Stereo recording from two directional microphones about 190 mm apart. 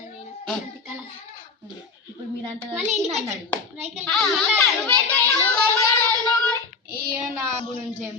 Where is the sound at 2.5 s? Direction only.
35° right (ahead or behind).